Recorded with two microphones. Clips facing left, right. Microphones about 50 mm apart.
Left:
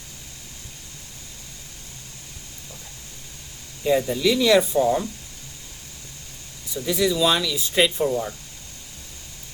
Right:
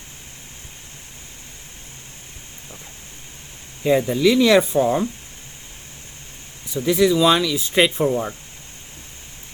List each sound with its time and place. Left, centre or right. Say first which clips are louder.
3.8 s speech: right 3 dB; right
6.8 s speech: right 5 dB; right